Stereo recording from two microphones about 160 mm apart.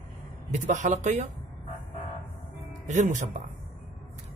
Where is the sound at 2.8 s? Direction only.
50° right (ahead or behind).